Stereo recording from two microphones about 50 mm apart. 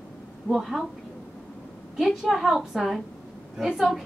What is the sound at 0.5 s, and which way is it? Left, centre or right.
Speech, centre.